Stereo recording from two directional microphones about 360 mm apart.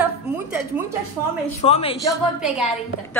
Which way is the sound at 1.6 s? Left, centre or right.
Centre.